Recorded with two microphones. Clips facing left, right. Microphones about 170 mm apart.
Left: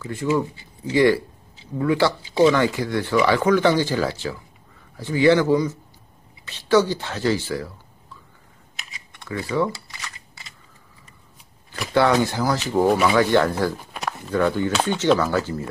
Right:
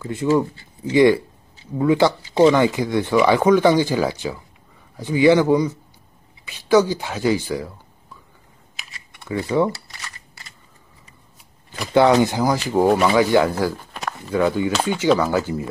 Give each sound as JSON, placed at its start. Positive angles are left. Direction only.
{"t": 0.0, "sound": "speech", "side_deg": -20}
{"t": 9.1, "sound": "speech", "side_deg": -15}
{"t": 11.9, "sound": "speech", "side_deg": -20}
{"t": 12.9, "sound": "speech", "side_deg": 0}
{"t": 13.9, "sound": "a sound", "side_deg": 0}
{"t": 14.3, "sound": "speech", "side_deg": -10}